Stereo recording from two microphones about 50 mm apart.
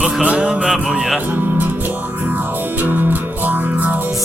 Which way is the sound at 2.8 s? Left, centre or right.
Right.